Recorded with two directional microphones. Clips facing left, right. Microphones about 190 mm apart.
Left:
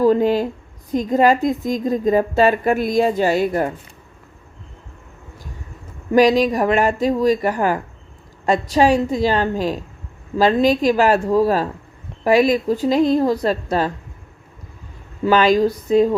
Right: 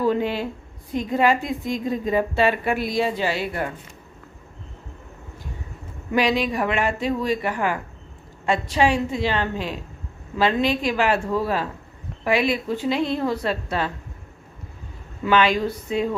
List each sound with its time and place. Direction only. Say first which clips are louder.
0.0 s a sound: left 7 dB; 40° left (ahead or behind)
0.9 s a woman's voice: left 5 dB; 40° left (ahead or behind)
6.1 s a woman's voice: left 7 dB; 40° left (ahead or behind)
15.2 s a woman's voice: left 5 dB; 40° left (ahead or behind)